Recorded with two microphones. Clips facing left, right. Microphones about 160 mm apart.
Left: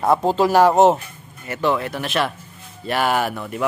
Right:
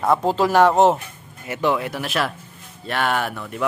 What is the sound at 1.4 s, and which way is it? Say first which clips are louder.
A man's voice: even; 15° right (ahead or behind).